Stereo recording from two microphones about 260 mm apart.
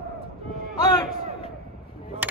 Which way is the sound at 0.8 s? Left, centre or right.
Centre.